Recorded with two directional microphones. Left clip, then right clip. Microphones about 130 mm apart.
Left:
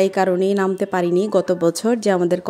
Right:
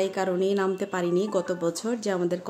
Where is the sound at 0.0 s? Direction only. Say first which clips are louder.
Left 8 dB; 55° left (ahead or behind).